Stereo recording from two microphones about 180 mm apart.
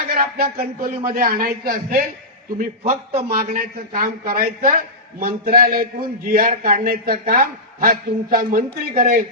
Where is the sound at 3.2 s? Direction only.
50° right (ahead or behind).